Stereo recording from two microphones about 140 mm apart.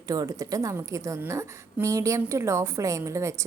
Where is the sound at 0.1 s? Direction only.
25° right (ahead or behind).